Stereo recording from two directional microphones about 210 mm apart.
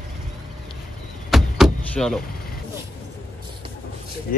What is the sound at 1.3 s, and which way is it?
Door, centre (ahead or behind).